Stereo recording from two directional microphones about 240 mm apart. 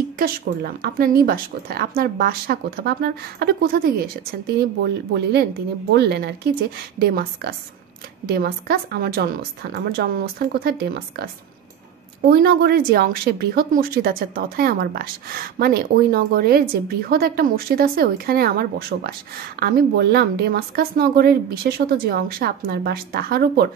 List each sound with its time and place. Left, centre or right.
0.2 s speech: right
12.3 s speech: right